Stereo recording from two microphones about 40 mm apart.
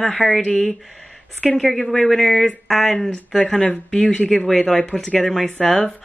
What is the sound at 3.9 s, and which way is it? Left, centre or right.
Speech, centre.